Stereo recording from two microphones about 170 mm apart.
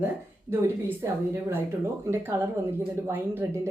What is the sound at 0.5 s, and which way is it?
Speech, 15° right (ahead or behind).